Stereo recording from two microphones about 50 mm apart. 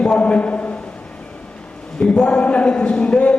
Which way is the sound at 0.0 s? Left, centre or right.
Left.